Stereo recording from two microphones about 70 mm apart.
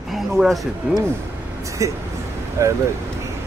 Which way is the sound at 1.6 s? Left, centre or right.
Right.